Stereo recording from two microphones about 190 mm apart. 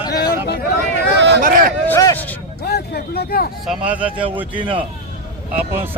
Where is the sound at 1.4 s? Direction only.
45° right (ahead or behind).